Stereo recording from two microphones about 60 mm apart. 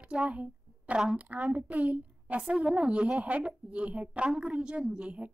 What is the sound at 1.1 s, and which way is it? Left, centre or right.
A woman's voice, right.